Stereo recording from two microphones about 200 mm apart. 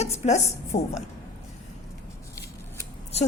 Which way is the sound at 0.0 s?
35° left (ahead or behind).